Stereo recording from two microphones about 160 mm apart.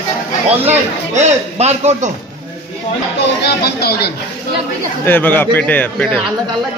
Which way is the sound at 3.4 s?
80° left.